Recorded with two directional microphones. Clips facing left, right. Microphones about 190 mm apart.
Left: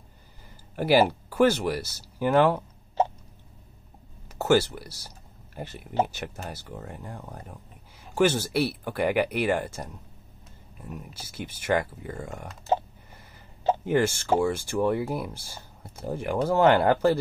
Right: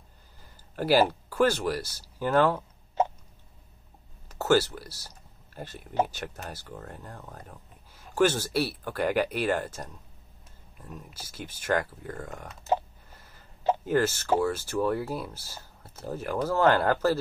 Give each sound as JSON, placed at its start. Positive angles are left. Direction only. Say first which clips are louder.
{"t": 0.7, "sound": "speech", "louder": "left 2 dB", "side_deg": 10}
{"t": 4.3, "sound": "speech", "louder": "left 1 dB", "side_deg": 10}
{"t": 13.8, "sound": "speech", "louder": "left 2 dB", "side_deg": 10}